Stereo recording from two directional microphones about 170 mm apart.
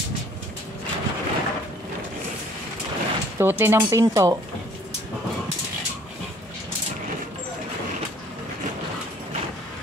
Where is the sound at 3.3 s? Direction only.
15° right (ahead or behind).